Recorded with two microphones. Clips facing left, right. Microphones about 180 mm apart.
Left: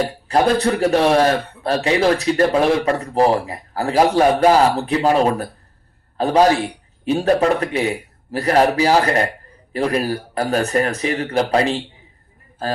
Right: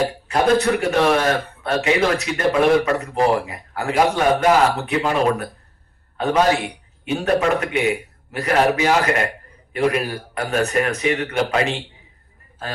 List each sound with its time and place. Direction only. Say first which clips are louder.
0.3 s a man's voice: left 1 dB; 35° left (ahead or behind)